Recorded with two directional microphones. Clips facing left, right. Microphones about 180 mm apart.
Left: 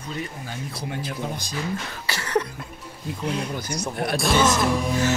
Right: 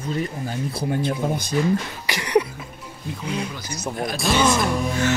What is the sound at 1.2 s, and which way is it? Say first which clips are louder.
Speech: right 5 dB; 45° right (ahead or behind).